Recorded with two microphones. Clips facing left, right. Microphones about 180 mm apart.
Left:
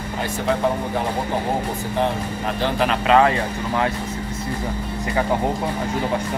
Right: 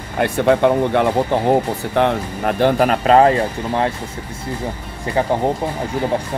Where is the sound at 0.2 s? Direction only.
65° right (ahead or behind); by 3.9 s 35° right (ahead or behind).